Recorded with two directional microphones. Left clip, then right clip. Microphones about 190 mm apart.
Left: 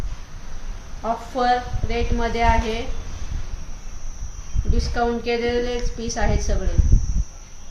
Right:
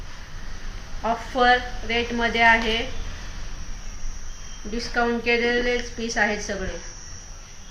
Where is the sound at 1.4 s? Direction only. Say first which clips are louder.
Right 2 dB; 25° left (ahead or behind).